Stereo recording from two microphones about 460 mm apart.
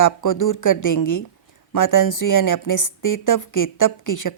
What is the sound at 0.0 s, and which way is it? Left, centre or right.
Speech, left.